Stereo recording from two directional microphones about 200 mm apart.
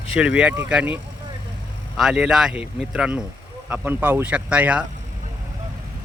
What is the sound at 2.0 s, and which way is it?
Speech, 5° right (ahead or behind).